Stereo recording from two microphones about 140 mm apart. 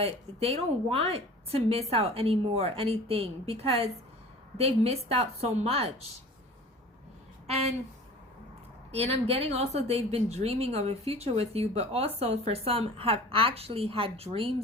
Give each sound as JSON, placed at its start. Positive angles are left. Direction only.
{"t": 0.0, "sound": "a woman's voice", "side_deg": -45}
{"t": 8.9, "sound": "a woman's voice", "side_deg": -50}